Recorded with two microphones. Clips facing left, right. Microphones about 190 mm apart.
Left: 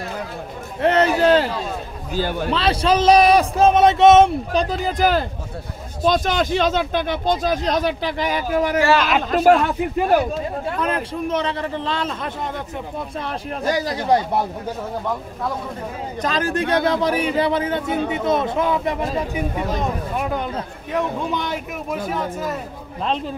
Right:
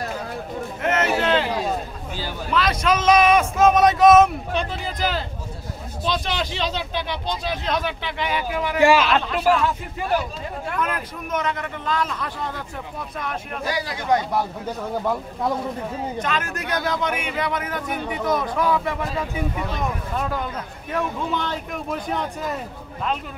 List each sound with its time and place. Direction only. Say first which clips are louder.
0.8 s a sound: left 6 dB; 35° left (ahead or behind)
2.1 s speech: left 10 dB; 55° left (ahead or behind)
2.5 s a man's voice: left 2 dB; 30° left (ahead or behind)
9.6 s speech: left 5 dB; 60° left (ahead or behind)
10.7 s speech: left 2 dB; 30° left (ahead or behind)
13.7 s a man's voice: left 4 dB; 45° left (ahead or behind)
16.2 s speech: left 10 dB; 35° left (ahead or behind); by 21.5 s 15° left (ahead or behind)
21.9 s speech: left 3 dB; 5° left (ahead or behind)